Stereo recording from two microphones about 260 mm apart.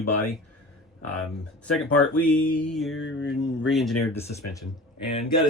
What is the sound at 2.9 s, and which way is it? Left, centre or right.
Speech, left.